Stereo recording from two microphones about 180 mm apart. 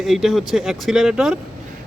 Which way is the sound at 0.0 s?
Centre (ahead or behind).